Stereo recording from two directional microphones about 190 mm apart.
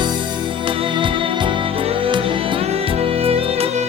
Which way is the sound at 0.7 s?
25° right (ahead or behind).